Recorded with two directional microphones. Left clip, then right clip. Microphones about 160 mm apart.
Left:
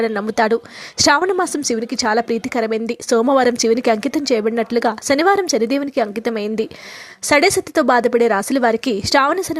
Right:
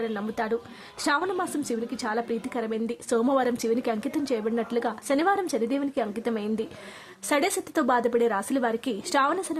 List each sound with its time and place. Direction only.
0.0 s a woman's voice: 40° left (ahead or behind)